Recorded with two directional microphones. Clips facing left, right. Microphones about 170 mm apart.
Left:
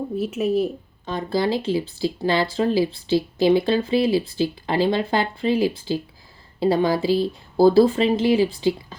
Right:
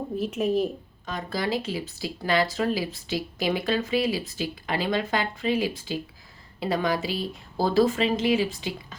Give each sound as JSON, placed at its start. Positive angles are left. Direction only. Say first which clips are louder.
{"t": 0.2, "sound": "speech", "louder": "left 3 dB", "side_deg": 5}
{"t": 1.0, "sound": "speech", "louder": "left 7 dB", "side_deg": 30}